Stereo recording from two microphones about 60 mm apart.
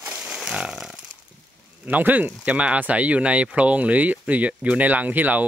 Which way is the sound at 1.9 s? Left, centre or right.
Right.